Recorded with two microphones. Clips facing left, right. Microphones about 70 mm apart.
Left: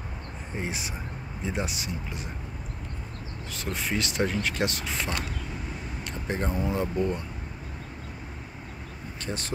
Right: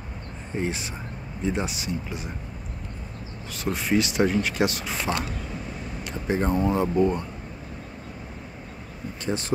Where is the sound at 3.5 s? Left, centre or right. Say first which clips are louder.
Right 7 dB; centre.